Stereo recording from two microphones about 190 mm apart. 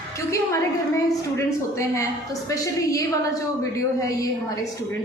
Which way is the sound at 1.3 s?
15° left (ahead or behind).